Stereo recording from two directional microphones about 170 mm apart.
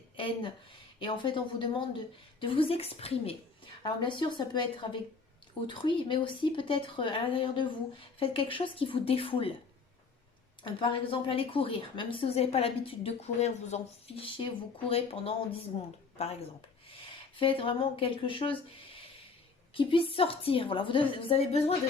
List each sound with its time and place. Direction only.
0.2 s a woman's voice: 30° left (ahead or behind)
10.6 s a woman's voice: 30° left (ahead or behind)
19.7 s a woman's voice: 30° left (ahead or behind)